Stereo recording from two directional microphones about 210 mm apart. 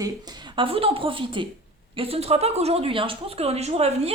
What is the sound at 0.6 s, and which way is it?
A woman's voice, 25° right (ahead or behind).